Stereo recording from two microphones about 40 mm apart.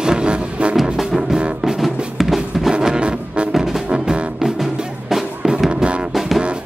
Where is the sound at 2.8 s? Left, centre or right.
Right.